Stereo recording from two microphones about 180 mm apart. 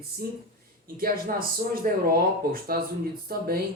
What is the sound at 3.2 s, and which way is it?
Speech, 55° right (ahead or behind).